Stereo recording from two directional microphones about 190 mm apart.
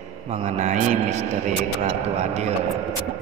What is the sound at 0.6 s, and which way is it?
Mantra, 40° right (ahead or behind).